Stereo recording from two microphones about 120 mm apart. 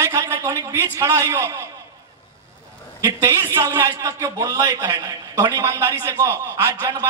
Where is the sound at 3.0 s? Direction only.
25° right (ahead or behind).